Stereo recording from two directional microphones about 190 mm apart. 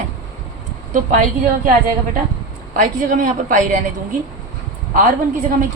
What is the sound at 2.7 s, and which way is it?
A woman's voice, 45° right (ahead or behind).